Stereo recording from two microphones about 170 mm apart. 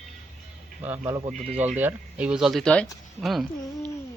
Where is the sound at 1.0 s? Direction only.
25° right (ahead or behind).